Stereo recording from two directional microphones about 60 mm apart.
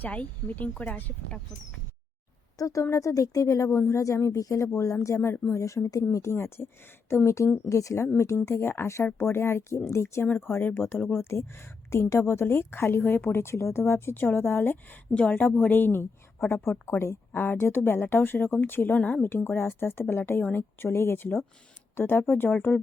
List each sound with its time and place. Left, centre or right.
0.0 s speech: left
2.6 s speech: left
5.3 s speech: left
5.5 s speech: left
6.3 s speech: left
7.3 s speech: left
8.0 s a woman's voice: left
10.2 s speech: left
10.5 s a woman's voice: left
13.3 s speech: left
15.1 s speech: left